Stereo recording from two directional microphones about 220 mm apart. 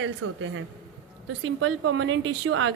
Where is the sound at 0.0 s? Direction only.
60° right (ahead or behind).